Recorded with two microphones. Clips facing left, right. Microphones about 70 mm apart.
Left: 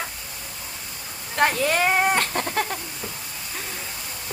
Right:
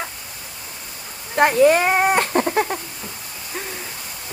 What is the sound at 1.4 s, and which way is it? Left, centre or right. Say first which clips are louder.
Speech: right 7 dB; right.